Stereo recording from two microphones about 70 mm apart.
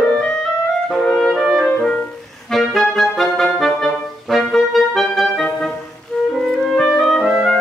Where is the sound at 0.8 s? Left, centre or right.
Centre.